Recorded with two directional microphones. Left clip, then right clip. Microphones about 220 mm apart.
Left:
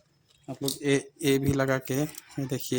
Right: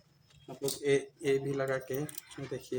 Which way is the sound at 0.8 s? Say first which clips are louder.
Left 3 dB; 50° left (ahead or behind).